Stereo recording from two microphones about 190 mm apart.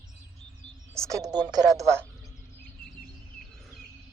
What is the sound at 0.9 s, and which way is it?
Speech, 15° right (ahead or behind).